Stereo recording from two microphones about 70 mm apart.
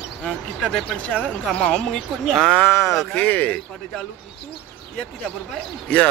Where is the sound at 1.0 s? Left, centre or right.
Centre.